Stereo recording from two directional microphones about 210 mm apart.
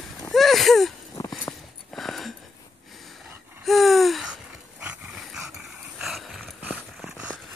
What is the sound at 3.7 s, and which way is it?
Dog, centre (ahead or behind).